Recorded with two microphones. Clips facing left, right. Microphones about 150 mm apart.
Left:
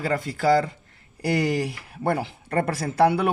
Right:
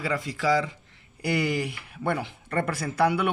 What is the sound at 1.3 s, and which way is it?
Speech, 35° left (ahead or behind).